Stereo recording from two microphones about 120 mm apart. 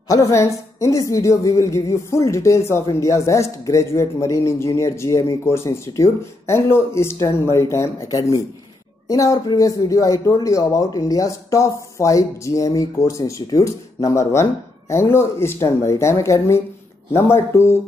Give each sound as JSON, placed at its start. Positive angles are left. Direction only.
{"t": 0.1, "sound": "a woman's voice", "side_deg": 25}